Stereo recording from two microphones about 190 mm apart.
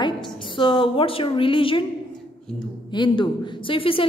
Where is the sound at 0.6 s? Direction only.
25° left (ahead or behind).